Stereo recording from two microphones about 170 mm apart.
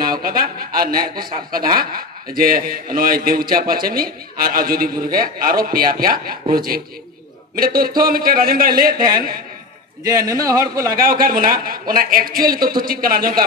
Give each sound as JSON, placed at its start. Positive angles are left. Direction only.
{"t": 0.0, "sound": "a man's voice", "side_deg": -60}
{"t": 10.0, "sound": "a man's voice", "side_deg": -20}
{"t": 10.9, "sound": "a man's voice", "side_deg": -60}